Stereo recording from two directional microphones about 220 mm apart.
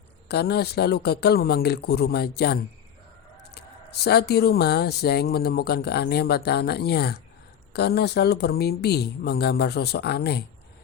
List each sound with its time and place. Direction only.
0.3 s speech: 45° left (ahead or behind)
4.0 s speech: 45° left (ahead or behind)